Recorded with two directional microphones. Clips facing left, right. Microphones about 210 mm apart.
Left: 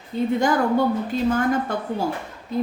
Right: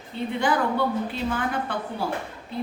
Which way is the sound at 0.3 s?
45° left (ahead or behind).